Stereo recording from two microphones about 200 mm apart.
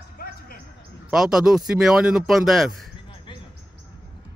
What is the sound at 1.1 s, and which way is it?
Speech, centre (ahead or behind).